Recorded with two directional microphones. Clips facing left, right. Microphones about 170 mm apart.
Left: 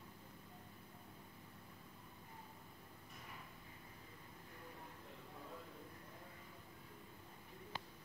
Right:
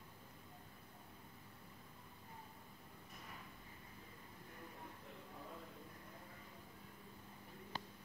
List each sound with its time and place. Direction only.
7.7 s bird: 40° right (ahead or behind)